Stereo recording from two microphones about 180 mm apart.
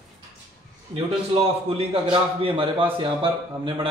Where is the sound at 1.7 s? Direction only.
30° right (ahead or behind).